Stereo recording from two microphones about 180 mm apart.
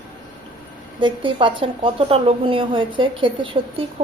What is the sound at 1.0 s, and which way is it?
A woman's voice, 25° right (ahead or behind).